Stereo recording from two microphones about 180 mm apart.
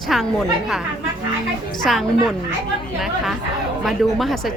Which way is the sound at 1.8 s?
Centre (ahead or behind).